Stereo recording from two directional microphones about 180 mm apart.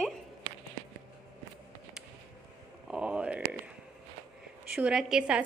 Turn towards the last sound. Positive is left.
turn(degrees=-5)  # may be behind; listen again after turning